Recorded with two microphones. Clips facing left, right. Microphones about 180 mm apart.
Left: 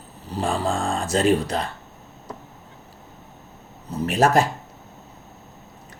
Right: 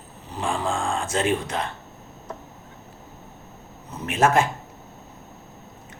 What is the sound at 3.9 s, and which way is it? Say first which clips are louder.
Speech: left 2 dB; 35° left (ahead or behind).